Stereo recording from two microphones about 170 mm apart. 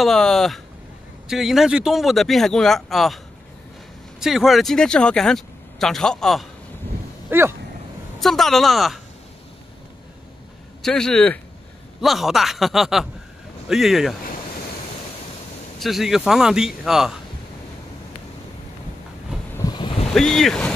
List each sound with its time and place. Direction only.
0.0 s speech: centre (ahead or behind)
4.2 s speech: centre (ahead or behind)
7.2 s speech: 15° right (ahead or behind)
8.2 s speech: centre (ahead or behind)
10.8 s speech: 5° left (ahead or behind)
15.8 s speech: centre (ahead or behind)
19.5 s wind: 25° left (ahead or behind)
20.2 s speech: 5° left (ahead or behind)